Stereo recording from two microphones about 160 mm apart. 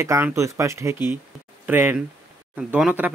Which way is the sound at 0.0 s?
15° right (ahead or behind).